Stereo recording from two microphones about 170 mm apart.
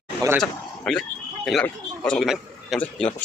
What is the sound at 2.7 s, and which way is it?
Speech, 10° left (ahead or behind).